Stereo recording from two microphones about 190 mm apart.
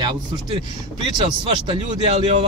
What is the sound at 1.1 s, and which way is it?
Speech, 25° right (ahead or behind).